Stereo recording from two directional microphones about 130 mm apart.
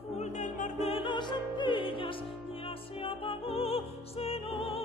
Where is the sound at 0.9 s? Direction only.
40° left (ahead or behind).